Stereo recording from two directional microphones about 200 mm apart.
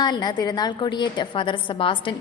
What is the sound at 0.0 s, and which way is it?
A woman's voice, 20° left (ahead or behind).